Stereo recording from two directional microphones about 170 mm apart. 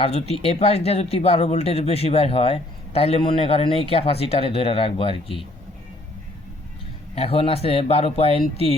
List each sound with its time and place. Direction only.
0.0 s speech: 35° left (ahead or behind)
7.2 s speech: 35° left (ahead or behind)